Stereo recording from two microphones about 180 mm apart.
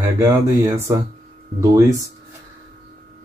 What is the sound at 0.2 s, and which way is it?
Speech, 15° right (ahead or behind).